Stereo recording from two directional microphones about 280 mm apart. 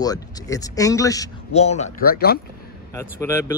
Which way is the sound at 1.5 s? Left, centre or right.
Left.